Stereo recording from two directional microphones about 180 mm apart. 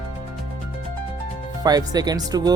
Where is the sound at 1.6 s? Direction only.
20° right (ahead or behind).